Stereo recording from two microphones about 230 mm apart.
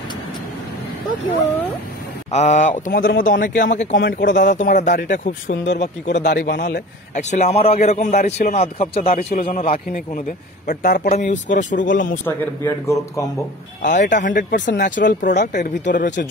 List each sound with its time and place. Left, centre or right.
2.3 s speech: left
3.9 s speech: left
4.5 s speech: left
5.6 s speech: left
7.2 s a man's voice: left
12.6 s speech: centre
13.8 s speech: left
14.5 s speech: left
15.0 s speech: left